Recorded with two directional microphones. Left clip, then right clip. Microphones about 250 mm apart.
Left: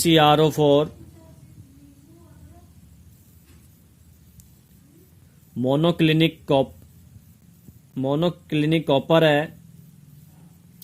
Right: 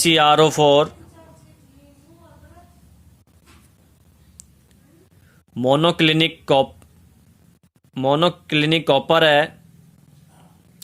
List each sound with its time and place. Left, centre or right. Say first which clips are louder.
0.0 s speech: right 3 dB; centre
5.5 s speech: right 4 dB; centre
7.9 s speech: right 6 dB; right